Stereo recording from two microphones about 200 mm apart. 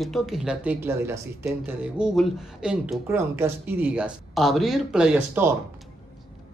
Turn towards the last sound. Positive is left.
turn(degrees=-5)  # may be behind; listen again after turning